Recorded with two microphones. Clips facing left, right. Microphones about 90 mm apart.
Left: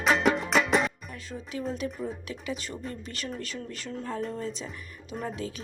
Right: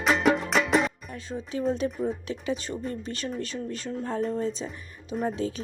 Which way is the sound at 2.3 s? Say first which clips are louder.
Right 5 dB; 30° right (ahead or behind).